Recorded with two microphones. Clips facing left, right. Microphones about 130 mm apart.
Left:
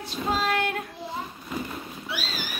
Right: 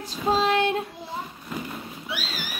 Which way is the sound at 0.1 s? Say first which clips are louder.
Right 4 dB; 25° right (ahead or behind).